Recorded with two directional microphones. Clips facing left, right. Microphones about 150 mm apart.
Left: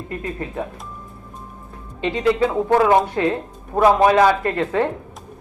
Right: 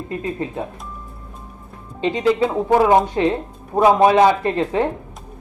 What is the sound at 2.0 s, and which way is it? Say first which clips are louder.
A man's voice: right 1 dB; 20° right (ahead or behind).